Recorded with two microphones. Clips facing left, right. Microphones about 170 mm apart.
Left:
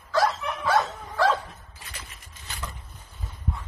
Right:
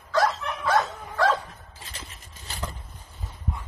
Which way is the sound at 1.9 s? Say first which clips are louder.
Even; 30° right (ahead or behind).